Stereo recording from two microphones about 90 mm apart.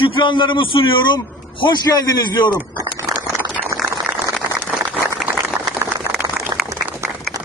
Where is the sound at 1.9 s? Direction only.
50° left (ahead or behind).